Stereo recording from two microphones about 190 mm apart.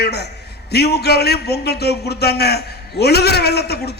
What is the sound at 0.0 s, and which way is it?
A man's voice, 60° left (ahead or behind).